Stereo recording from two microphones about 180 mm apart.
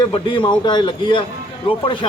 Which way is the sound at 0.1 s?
25° left (ahead or behind).